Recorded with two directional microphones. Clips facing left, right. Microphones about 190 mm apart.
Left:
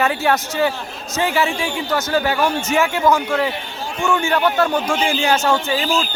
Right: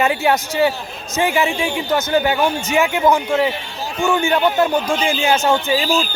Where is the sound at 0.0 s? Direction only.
15° right (ahead or behind).